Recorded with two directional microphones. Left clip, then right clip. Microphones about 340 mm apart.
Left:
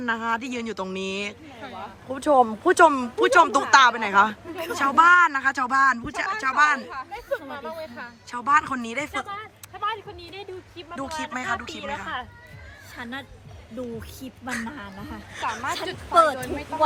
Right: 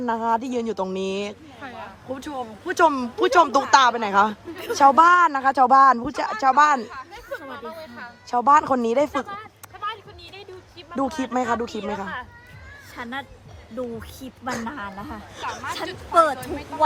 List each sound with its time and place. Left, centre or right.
0.0 s speech: centre
7.1 s a sound: centre
8.3 s speech: centre
9.3 s a sound: centre
10.9 s speech: centre
13.0 s speech: centre